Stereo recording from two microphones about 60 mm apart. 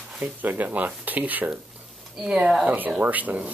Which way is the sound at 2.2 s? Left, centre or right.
Centre.